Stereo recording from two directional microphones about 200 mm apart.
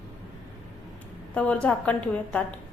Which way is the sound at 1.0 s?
5° left (ahead or behind).